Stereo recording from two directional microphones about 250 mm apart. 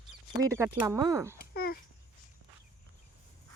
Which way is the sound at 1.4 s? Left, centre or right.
Left.